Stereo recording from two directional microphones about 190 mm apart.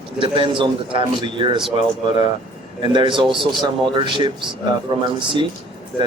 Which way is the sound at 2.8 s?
25° right (ahead or behind).